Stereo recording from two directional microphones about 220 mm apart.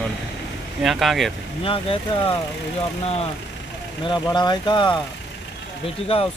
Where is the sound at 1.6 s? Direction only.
25° left (ahead or behind).